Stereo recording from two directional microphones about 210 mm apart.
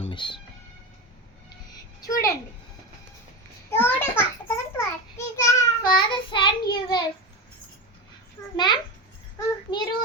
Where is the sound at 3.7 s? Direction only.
10° left (ahead or behind).